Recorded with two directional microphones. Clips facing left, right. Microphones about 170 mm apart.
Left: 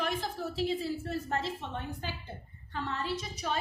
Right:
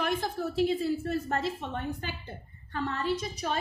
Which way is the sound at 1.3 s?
55° right (ahead or behind).